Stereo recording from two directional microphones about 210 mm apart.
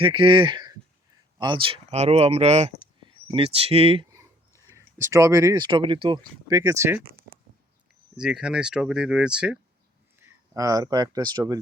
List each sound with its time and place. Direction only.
0.0 s speech: 25° right (ahead or behind)
4.2 s speech: 15° right (ahead or behind)
8.1 s speech: 5° right (ahead or behind); by 11.5 s 20° right (ahead or behind)